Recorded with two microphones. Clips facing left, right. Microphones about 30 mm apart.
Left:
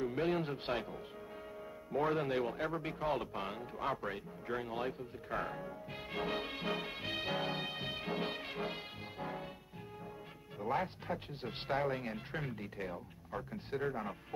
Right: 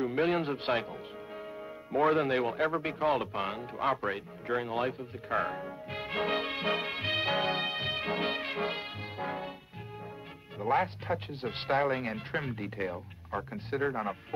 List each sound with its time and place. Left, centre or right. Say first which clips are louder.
0.0 s speech: right 6 dB; right
1.9 s speech: right 7 dB; right
10.6 s speech: right 8 dB; right